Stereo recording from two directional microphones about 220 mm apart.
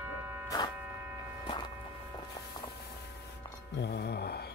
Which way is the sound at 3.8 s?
45° left (ahead or behind).